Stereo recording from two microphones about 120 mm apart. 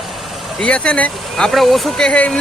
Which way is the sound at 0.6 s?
10° left (ahead or behind).